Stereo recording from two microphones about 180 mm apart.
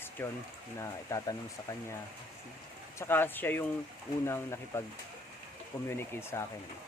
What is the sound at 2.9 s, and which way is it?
Speech, 10° left (ahead or behind).